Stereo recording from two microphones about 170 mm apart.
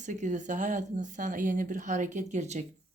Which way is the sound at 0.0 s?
45° right (ahead or behind).